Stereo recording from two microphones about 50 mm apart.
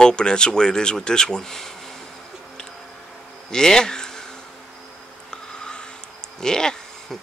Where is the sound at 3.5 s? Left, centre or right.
Centre.